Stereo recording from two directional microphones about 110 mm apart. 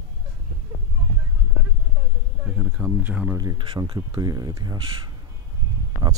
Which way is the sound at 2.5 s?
15° right (ahead or behind).